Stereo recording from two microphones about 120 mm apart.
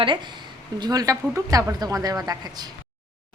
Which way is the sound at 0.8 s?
30° right (ahead or behind).